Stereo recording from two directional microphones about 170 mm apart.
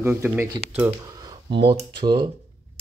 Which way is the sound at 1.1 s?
25° right (ahead or behind).